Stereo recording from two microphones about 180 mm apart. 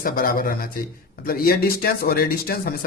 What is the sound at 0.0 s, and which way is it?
Speech, 50° left (ahead or behind).